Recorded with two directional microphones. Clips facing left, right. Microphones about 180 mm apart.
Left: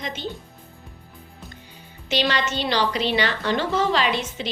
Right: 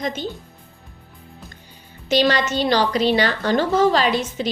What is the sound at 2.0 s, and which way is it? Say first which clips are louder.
A woman's voice: right 5 dB; 40° right (ahead or behind).